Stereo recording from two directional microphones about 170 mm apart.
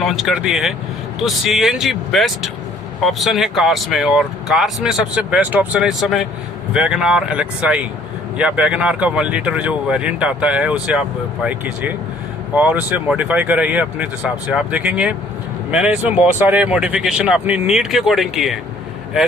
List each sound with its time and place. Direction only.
0.0 s speech: centre (ahead or behind)